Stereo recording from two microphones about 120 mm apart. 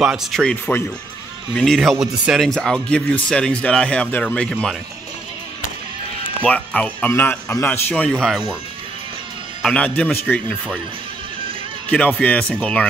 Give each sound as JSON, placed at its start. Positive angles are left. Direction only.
{"t": 0.0, "sound": "speech", "side_deg": 0}
{"t": 6.4, "sound": "speech", "side_deg": 10}
{"t": 9.6, "sound": "a man's voice", "side_deg": 5}
{"t": 11.9, "sound": "speech", "side_deg": 10}